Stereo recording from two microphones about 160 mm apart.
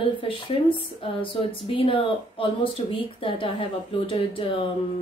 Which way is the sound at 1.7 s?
35° left (ahead or behind).